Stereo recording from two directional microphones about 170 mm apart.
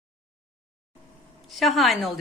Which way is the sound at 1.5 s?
Centre (ahead or behind).